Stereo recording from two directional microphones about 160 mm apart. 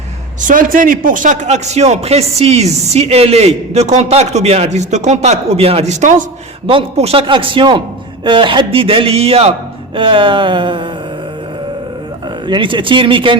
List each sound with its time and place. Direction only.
0.4 s a man's voice: 55° right (ahead or behind)
6.7 s a man's voice: 35° right (ahead or behind)
12.5 s a man's voice: 30° right (ahead or behind)